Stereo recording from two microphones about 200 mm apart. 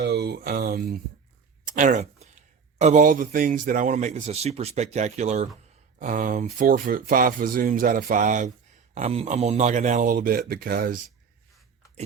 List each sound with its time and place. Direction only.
0.0 s speech: 55° right (ahead or behind)
1.6 s a sound: 40° right (ahead or behind)
2.7 s speech: 35° right (ahead or behind)